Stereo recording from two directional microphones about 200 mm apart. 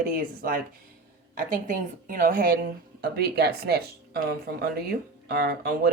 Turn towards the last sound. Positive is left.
turn(degrees=-50)  # may be behind; listen again after turning